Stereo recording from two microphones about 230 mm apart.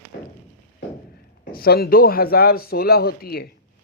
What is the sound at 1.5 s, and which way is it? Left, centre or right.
A man's voice, left.